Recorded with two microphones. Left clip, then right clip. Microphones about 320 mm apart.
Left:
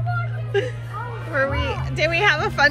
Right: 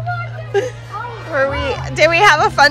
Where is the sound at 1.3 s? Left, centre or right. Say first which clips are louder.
Right 5 dB; centre.